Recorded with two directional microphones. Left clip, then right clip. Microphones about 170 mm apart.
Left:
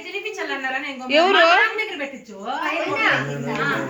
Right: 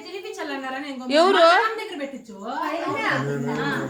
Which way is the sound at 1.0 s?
25° right (ahead or behind).